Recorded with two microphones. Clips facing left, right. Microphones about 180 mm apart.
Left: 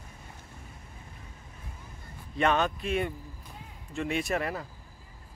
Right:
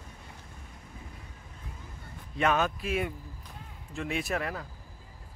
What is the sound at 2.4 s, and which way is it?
A man's voice, 5° right (ahead or behind).